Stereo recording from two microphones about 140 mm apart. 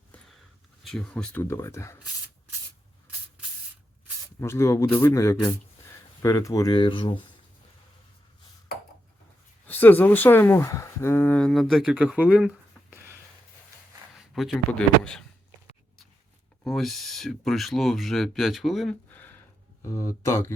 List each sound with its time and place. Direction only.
0.9 s speech: 5° left (ahead or behind)
1.4 s speech: 20° left (ahead or behind)
4.4 s speech: 20° left (ahead or behind); by 7.2 s 35° left (ahead or behind)
9.6 s speech: 15° left (ahead or behind); by 13.0 s 5° right (ahead or behind)
14.2 s a sound: 5° right (ahead or behind)
14.5 s speech: 10° left (ahead or behind)
16.6 s speech: centre (ahead or behind)
19.1 s a sound: 15° left (ahead or behind)
19.8 s speech: 20° left (ahead or behind)